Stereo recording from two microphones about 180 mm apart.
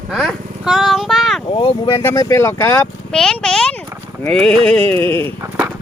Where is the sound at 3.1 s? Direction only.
5° left (ahead or behind).